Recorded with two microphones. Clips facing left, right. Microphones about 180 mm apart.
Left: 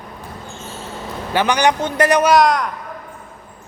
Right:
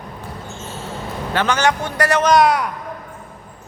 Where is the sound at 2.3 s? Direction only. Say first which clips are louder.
Even; 5° right (ahead or behind).